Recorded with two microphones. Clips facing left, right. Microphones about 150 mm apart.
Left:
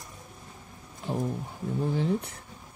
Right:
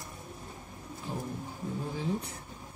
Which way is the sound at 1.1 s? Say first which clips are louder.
Left 7 dB; 70° left (ahead or behind).